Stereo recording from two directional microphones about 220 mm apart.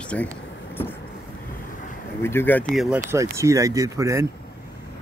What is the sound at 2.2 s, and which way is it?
Speech, 10° left (ahead or behind).